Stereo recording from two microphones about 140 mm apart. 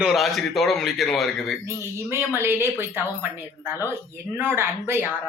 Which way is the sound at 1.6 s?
15° right (ahead or behind).